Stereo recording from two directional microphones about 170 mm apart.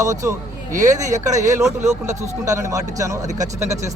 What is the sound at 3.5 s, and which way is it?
Speech, 40° right (ahead or behind).